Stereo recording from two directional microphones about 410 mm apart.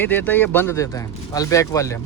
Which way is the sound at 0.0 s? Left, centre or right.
Centre.